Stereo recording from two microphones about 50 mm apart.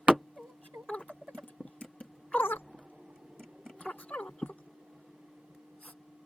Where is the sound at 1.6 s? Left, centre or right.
Left.